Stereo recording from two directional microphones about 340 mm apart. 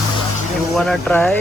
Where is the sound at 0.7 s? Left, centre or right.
Centre.